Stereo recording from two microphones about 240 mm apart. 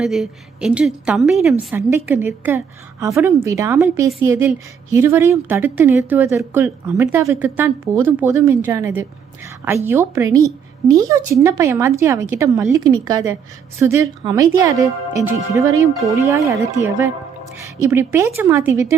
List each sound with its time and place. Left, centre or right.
0.0 s a woman's voice: centre
17.8 s a woman's voice: centre